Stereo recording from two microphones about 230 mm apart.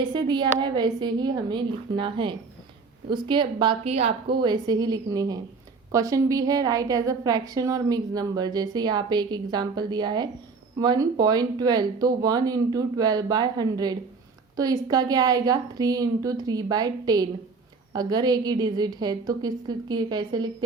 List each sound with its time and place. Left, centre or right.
0.0 s a woman's voice: centre